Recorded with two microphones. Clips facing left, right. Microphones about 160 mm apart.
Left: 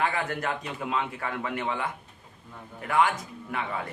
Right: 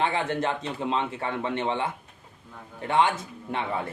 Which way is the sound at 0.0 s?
25° right (ahead or behind).